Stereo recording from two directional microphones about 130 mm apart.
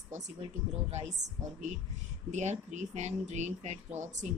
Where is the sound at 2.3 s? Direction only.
65° right (ahead or behind).